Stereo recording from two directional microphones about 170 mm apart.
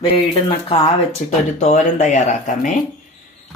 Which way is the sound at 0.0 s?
35° left (ahead or behind).